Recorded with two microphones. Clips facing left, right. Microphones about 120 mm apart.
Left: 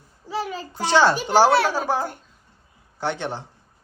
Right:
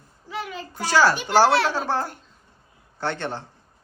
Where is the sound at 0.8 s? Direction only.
25° left (ahead or behind).